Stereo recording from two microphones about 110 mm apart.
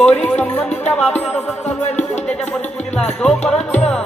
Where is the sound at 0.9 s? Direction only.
5° left (ahead or behind).